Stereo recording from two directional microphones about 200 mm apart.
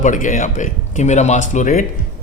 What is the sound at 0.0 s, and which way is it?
A man's voice, 40° left (ahead or behind).